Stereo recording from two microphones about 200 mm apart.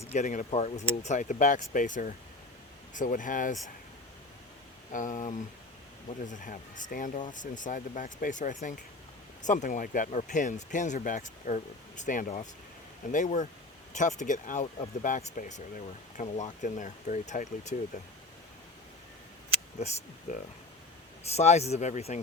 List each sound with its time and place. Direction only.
0.1 s speech: 35° left (ahead or behind)
4.9 s speech: 40° left (ahead or behind)
19.8 s speech: 35° left (ahead or behind)